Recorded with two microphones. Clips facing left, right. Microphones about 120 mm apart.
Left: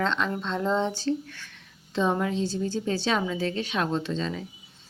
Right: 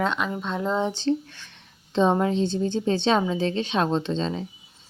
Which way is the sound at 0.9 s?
20° right (ahead or behind).